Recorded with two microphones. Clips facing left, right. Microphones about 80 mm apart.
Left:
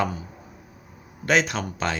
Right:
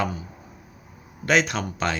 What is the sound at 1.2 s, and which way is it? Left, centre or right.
Speech, left.